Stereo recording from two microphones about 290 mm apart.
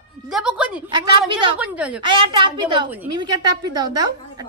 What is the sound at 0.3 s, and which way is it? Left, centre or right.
A woman's voice, centre.